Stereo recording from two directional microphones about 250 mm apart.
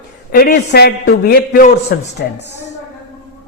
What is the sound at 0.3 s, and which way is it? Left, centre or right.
A man's voice, left.